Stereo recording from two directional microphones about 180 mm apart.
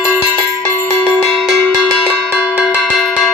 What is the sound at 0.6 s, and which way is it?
Cowbell, 10° left (ahead or behind).